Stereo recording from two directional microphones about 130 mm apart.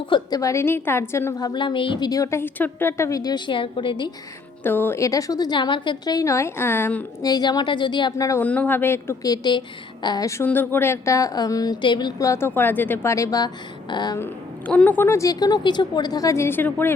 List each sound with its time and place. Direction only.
0.0 s a woman's voice: 35° left (ahead or behind)
4.6 s a woman's voice: 15° left (ahead or behind)
7.2 s a woman's voice: 30° left (ahead or behind)
8.1 s a woman's voice: 25° left (ahead or behind)
8.4 s speech: 10° left (ahead or behind)
9.3 s a woman's voice: 35° left (ahead or behind)
12.3 s a woman's voice: 15° left (ahead or behind); by 14.2 s 30° left (ahead or behind)
14.7 s a woman's voice: 10° left (ahead or behind)